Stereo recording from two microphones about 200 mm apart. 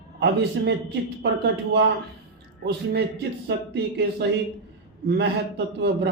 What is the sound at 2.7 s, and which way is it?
Speech, 55° right (ahead or behind).